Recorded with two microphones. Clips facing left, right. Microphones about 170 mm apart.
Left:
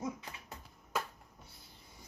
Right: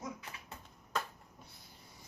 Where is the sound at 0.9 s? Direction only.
5° left (ahead or behind).